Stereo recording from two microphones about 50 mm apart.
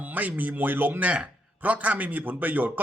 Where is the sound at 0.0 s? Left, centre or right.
Right.